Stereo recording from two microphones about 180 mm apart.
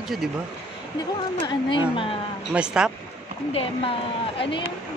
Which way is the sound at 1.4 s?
30° left (ahead or behind).